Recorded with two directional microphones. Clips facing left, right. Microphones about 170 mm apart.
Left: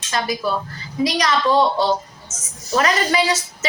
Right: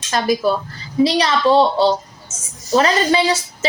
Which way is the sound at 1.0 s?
30° right (ahead or behind).